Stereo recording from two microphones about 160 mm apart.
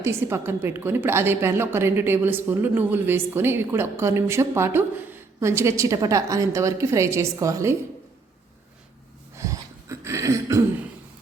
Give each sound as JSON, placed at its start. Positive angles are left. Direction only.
{"t": 0.0, "sound": "a woman's voice", "side_deg": -15}
{"t": 9.3, "sound": "throat clearing", "side_deg": -20}